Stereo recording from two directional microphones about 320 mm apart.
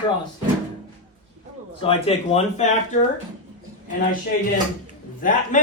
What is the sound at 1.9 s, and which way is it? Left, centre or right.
Speech, centre.